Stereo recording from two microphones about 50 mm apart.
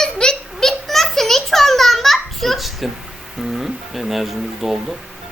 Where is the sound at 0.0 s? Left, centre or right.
Centre.